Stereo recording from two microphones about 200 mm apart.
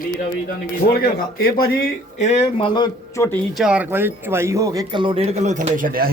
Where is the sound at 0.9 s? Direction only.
50° left (ahead or behind); by 3.2 s 20° left (ahead or behind).